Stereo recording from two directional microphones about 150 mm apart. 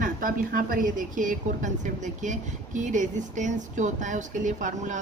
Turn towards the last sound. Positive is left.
turn(degrees=-55)  # may be behind; listen again after turning